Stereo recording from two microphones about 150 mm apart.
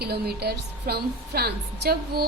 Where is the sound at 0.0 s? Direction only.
90° right.